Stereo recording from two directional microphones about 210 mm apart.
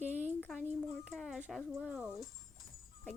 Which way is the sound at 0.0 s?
10° right (ahead or behind).